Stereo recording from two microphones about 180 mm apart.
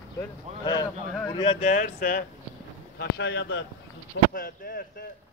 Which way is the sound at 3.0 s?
75° left (ahead or behind).